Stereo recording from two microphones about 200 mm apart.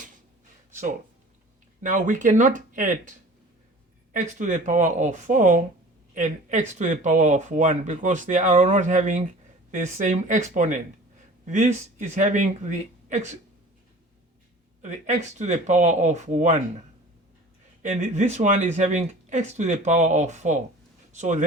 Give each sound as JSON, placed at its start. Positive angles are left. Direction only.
{"t": 0.7, "sound": "a sound", "side_deg": -40}
{"t": 1.8, "sound": "speech", "side_deg": -40}
{"t": 4.1, "sound": "speech", "side_deg": -40}
{"t": 14.8, "sound": "speech", "side_deg": -35}
{"t": 17.8, "sound": "speech", "side_deg": -35}